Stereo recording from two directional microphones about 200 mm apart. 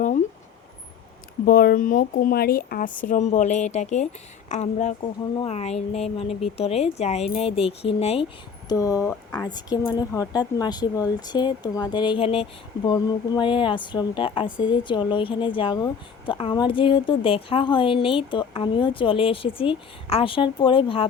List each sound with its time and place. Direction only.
1.5 s speech: 45° left (ahead or behind); by 8.3 s 30° left (ahead or behind)
8.7 s speech: 15° left (ahead or behind)